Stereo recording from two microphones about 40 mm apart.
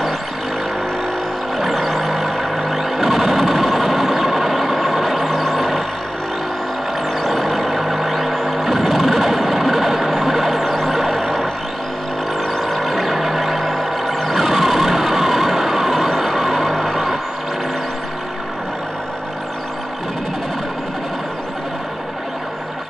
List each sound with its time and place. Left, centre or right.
1.6 s vehicle: centre
7.2 s vehicle: centre